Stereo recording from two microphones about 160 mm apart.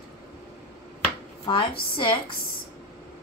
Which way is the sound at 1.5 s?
35° left (ahead or behind).